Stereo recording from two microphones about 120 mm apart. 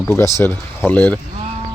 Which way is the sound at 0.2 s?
20° left (ahead or behind).